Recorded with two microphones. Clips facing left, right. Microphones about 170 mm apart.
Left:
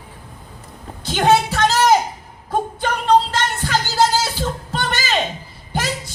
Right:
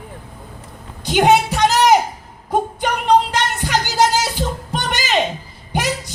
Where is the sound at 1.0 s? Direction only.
15° right (ahead or behind).